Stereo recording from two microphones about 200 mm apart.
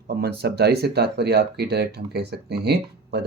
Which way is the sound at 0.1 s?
55° right (ahead or behind).